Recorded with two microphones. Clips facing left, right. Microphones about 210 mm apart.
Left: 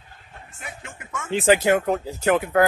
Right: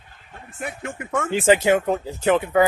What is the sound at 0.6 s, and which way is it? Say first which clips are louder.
Speech: right 10 dB; 55° right (ahead or behind).